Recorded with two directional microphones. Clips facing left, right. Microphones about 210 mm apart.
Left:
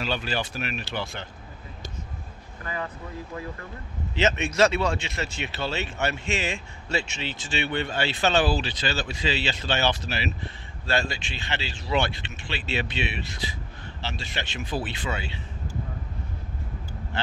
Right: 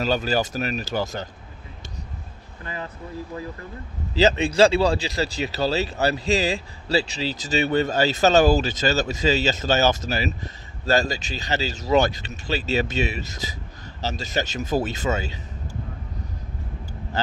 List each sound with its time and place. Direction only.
0.0 s speech: 40° right (ahead or behind)
2.6 s speech: 30° right (ahead or behind)
4.1 s speech: 35° right (ahead or behind)